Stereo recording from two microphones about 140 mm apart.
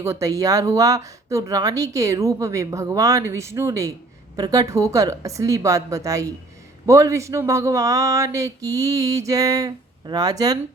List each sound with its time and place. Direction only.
0.0 s speech: 20° right (ahead or behind)